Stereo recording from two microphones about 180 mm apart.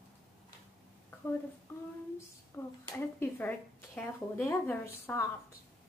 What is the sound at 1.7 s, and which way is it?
A woman's voice, 10° left (ahead or behind).